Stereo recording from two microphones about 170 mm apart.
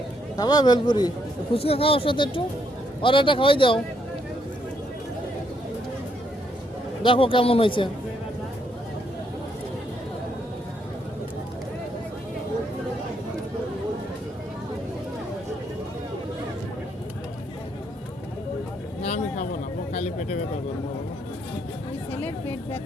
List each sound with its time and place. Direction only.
0.3 s speech: 25° left (ahead or behind)
1.5 s speech: 35° left (ahead or behind)
7.0 s speech: 30° left (ahead or behind)
19.0 s a sound: 40° left (ahead or behind)